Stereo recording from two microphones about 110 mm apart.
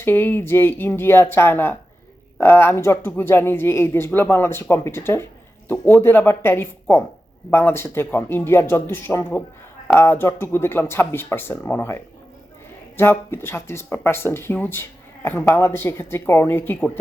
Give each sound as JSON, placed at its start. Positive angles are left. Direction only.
{"t": 0.0, "sound": "speech", "side_deg": 20}
{"t": 13.0, "sound": "speech", "side_deg": 20}